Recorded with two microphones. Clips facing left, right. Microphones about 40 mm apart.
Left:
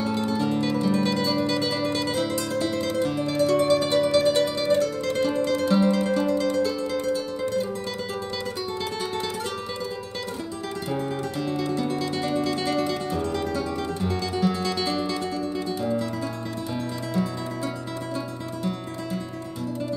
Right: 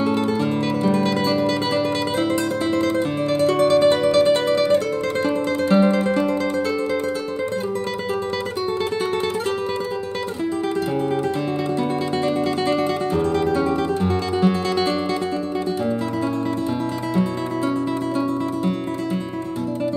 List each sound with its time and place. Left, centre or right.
0.0 s music: right
11.7 s music: right
17.1 s music: right